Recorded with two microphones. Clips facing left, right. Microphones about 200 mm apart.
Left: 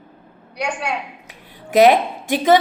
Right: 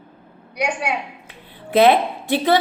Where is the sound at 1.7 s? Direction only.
15° left (ahead or behind).